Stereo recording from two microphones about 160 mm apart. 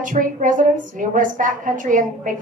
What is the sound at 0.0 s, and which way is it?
A woman's voice, 55° right (ahead or behind).